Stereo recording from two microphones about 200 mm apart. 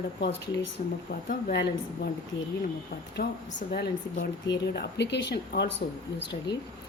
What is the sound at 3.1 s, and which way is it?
Speech, 55° left (ahead or behind).